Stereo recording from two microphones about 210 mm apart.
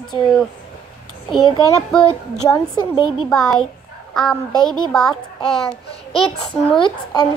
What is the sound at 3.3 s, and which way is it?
Speech, centre (ahead or behind).